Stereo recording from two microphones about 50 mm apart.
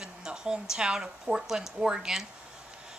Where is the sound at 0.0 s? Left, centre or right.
Centre.